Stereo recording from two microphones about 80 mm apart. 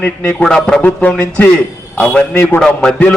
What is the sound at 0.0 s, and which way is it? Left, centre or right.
Speech, left.